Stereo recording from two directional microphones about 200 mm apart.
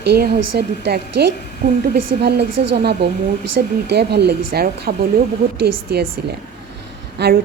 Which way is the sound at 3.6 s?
50° right (ahead or behind).